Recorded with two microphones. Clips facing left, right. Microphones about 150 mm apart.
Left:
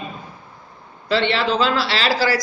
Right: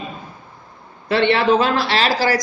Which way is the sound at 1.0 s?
55° right (ahead or behind).